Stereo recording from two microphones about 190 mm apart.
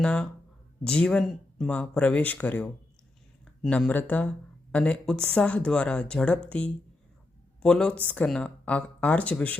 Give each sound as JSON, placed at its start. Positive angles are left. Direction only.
{"t": 0.0, "sound": "speech", "side_deg": 5}
{"t": 7.6, "sound": "speech", "side_deg": 5}